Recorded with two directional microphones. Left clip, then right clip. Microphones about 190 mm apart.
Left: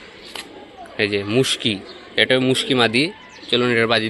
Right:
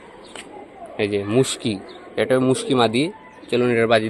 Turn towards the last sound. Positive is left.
turn(degrees=-5)  # may be behind; listen again after turning